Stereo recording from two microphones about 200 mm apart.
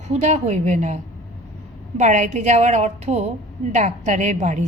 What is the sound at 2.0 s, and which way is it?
A woman's voice, 35° right (ahead or behind).